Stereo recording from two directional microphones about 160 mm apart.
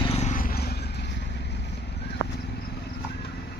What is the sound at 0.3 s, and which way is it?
Vehicle, 65° left (ahead or behind).